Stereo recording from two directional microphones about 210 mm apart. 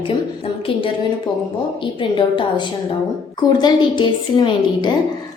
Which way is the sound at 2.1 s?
20° left (ahead or behind).